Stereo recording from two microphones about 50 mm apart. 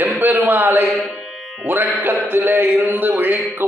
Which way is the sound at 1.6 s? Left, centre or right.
Right.